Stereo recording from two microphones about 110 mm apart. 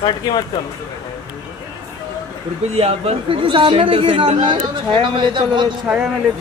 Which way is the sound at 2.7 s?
70° right (ahead or behind).